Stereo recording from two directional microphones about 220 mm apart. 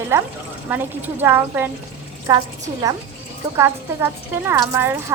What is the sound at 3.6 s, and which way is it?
A woman's voice, 10° right (ahead or behind).